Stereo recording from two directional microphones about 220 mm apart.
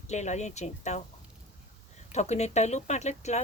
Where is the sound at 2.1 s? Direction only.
30° left (ahead or behind).